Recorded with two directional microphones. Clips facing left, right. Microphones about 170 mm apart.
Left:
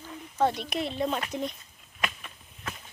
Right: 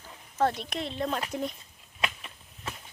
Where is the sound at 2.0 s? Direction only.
25° right (ahead or behind).